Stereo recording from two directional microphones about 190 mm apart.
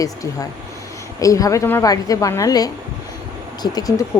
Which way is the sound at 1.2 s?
15° left (ahead or behind).